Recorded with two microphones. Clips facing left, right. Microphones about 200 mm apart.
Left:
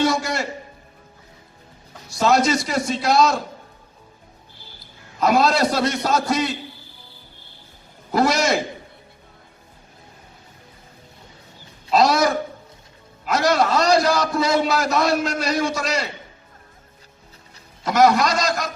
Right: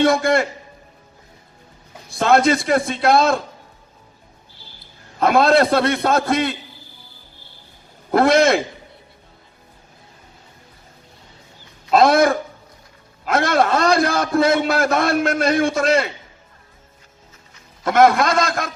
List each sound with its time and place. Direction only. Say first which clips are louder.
0.0 s a man's voice: right 5 dB; 55° right (ahead or behind)
2.0 s a man's voice: right 3 dB; 55° right (ahead or behind)
5.2 s a man's voice: right 3 dB; 55° right (ahead or behind)
8.1 s a man's voice: right 5 dB; 55° right (ahead or behind)
11.9 s a man's voice: right 4 dB; 55° right (ahead or behind)
17.8 s a man's voice: right 2 dB; 55° right (ahead or behind)